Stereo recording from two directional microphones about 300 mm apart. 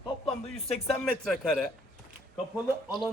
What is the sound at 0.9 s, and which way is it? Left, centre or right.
Speech, centre.